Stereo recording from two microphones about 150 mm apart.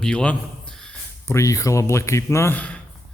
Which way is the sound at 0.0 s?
5° left (ahead or behind).